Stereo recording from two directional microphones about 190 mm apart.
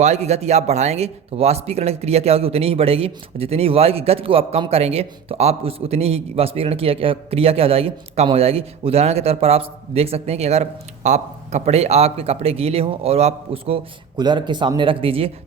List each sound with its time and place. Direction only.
0.0 s speech: 35° right (ahead or behind)